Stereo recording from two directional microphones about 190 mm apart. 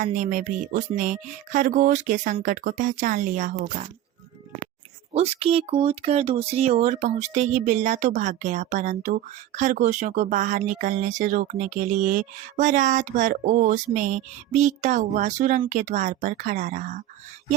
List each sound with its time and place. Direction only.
0.0 s music: 40° right (ahead or behind)
5.1 s speech: 35° right (ahead or behind)